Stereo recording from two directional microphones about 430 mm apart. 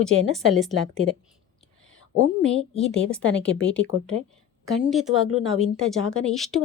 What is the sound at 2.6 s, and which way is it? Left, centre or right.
Speech, centre.